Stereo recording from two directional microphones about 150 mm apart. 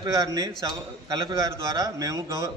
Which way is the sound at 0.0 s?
25° right (ahead or behind).